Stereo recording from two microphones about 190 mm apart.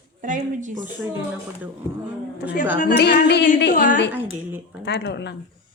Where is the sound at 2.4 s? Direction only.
60° left (ahead or behind).